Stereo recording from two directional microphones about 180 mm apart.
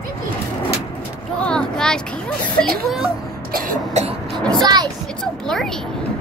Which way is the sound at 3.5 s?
45° right (ahead or behind).